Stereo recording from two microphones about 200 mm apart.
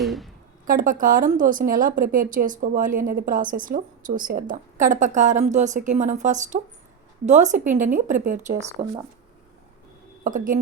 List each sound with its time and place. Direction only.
0.0 s a sound: centre (ahead or behind)
0.6 s a woman's voice: 45° right (ahead or behind)
10.2 s speech: 40° right (ahead or behind)